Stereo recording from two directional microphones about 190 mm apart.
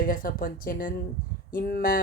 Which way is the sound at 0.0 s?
45° left (ahead or behind).